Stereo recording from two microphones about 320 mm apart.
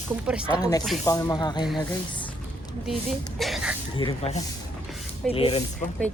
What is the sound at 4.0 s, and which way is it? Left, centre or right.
Speech, centre.